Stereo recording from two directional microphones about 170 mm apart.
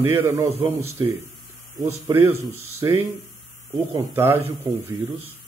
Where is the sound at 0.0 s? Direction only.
15° right (ahead or behind).